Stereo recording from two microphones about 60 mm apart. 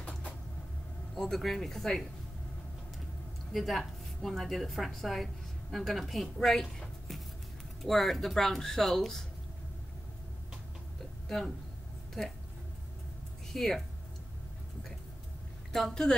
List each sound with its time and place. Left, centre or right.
1.1 s speech: centre
3.5 s a woman's voice: centre
11.2 s speech: centre
13.5 s speech: centre
15.7 s a woman's voice: centre